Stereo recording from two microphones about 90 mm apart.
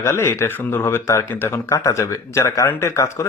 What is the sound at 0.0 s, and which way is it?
Speech, 30° left (ahead or behind).